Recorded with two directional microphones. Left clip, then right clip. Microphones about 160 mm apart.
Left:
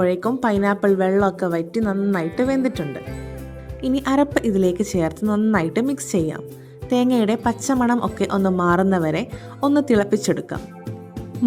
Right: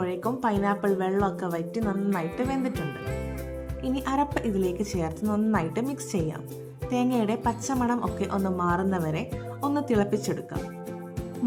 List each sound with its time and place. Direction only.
0.0 s a woman's voice: 35° left (ahead or behind)
3.8 s a woman's voice: 35° left (ahead or behind)